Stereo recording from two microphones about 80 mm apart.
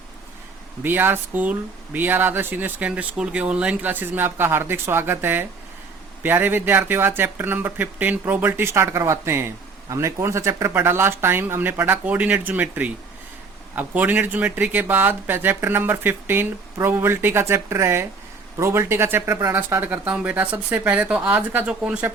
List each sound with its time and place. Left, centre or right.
0.8 s speech: right